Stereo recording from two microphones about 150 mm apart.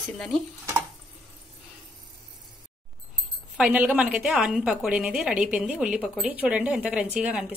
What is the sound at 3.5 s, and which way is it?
A woman's voice, 5° right (ahead or behind).